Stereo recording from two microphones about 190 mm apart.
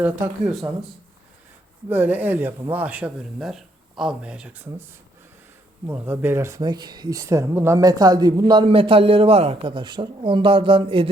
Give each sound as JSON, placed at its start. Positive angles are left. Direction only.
{"t": 0.0, "sound": "speech", "side_deg": -5}
{"t": 1.9, "sound": "speech", "side_deg": -10}